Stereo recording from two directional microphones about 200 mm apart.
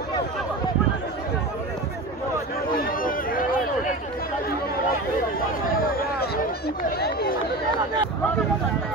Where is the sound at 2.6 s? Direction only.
45° left (ahead or behind).